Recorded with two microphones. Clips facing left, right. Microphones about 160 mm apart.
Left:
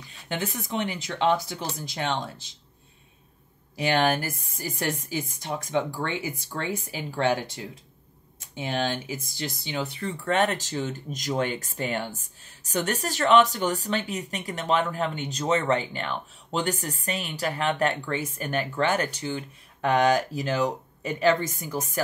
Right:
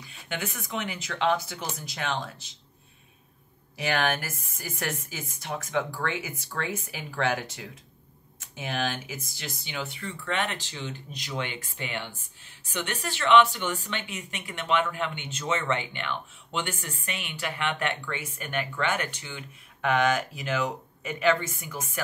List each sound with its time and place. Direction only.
0.3 s speech: 35° left (ahead or behind)
3.7 s speech: 35° left (ahead or behind)